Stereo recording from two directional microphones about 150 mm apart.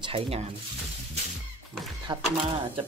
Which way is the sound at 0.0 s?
40° right (ahead or behind).